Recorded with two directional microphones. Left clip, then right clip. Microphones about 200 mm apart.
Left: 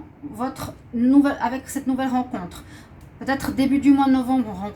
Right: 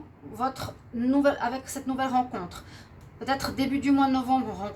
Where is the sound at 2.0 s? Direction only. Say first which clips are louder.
Right 2 dB; 40° right (ahead or behind).